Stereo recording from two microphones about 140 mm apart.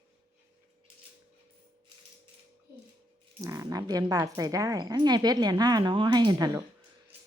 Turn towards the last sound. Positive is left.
turn(degrees=-25)  # may be behind; listen again after turning